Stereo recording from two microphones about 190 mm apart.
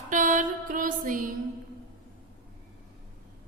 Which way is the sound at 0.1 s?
45° right (ahead or behind).